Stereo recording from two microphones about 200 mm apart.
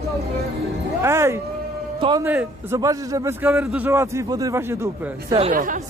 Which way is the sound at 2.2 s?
10° right (ahead or behind).